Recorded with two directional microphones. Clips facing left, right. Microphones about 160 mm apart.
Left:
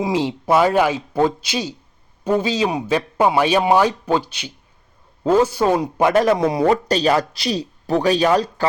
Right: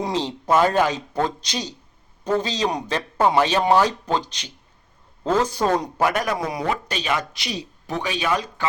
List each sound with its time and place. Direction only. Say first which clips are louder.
0.0 s a man's voice: left 5 dB; 10° left (ahead or behind)
6.0 s a man's voice: left 7 dB; 25° left (ahead or behind)